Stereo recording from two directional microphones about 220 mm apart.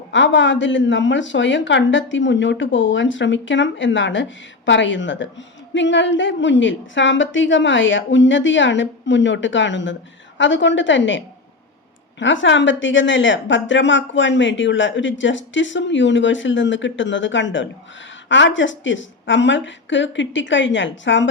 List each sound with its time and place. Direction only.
0.1 s speech: 55° left (ahead or behind)
12.2 s speech: 55° left (ahead or behind)